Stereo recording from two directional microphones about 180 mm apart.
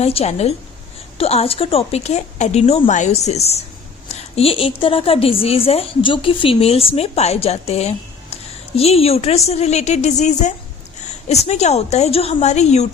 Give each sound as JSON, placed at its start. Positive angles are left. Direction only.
{"t": 0.0, "sound": "a woman's voice", "side_deg": 35}